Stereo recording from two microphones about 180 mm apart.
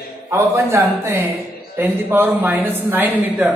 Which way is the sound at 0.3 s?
15° right (ahead or behind).